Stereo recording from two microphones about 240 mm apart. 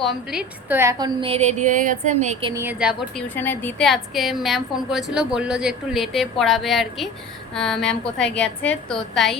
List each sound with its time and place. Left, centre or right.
0.0 s a woman's voice: centre; by 2.5 s right
2.5 s a woman's voice: centre
3.2 s a woman's voice: centre